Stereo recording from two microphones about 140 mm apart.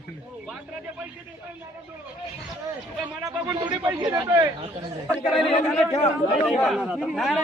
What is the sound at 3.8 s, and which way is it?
Speech, 25° right (ahead or behind).